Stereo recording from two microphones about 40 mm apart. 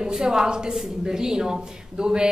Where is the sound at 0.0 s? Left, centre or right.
Centre.